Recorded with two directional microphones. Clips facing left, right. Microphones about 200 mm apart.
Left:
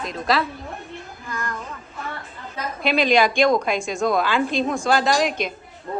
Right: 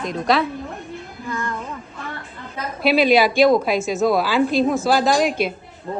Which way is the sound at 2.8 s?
5° right (ahead or behind).